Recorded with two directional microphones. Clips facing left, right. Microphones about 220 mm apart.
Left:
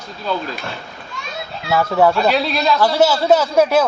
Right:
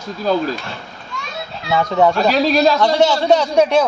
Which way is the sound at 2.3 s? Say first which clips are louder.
Right 4 dB; 40° right (ahead or behind).